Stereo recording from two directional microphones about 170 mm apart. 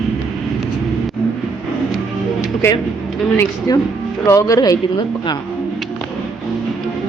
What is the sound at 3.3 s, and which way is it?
Speech, 15° left (ahead or behind).